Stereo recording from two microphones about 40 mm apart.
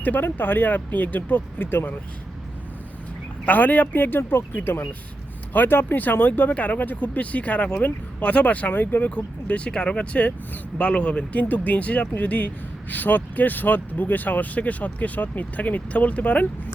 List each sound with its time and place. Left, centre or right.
0.0 s speech: left
3.4 s speech: left
6.0 s speech: left
8.8 s speech: left